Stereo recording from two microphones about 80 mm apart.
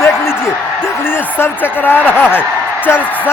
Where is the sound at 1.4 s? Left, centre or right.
Left.